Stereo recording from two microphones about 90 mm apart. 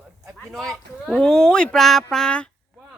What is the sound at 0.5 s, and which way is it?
Speech, 5° left (ahead or behind).